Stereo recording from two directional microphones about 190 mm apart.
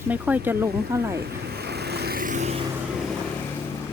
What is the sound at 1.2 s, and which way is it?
Vehicle, 55° right (ahead or behind).